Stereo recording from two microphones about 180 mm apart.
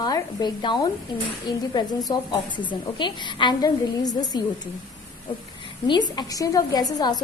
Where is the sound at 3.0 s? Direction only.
25° left (ahead or behind).